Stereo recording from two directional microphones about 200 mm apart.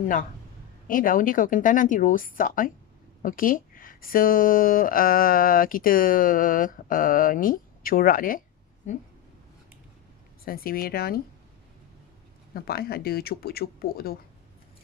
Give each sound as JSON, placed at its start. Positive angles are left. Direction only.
{"t": 0.8, "sound": "speech", "side_deg": 45}
{"t": 10.4, "sound": "speech", "side_deg": 45}
{"t": 12.5, "sound": "speech", "side_deg": 50}